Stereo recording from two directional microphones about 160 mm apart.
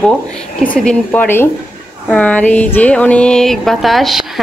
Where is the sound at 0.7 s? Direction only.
10° left (ahead or behind).